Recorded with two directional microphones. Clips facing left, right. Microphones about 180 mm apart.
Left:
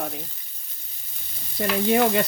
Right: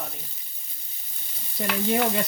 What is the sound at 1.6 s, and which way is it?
Stir, 80° left.